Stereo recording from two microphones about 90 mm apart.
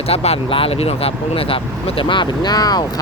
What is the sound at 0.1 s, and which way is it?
Speech, 90° left.